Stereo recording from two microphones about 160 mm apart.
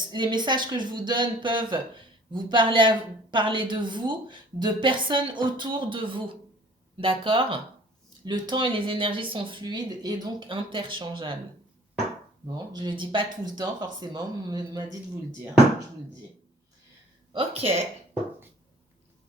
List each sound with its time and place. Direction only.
0.1 s speech: 30° right (ahead or behind)
12.7 s speech: 30° right (ahead or behind)
17.3 s speech: 40° right (ahead or behind)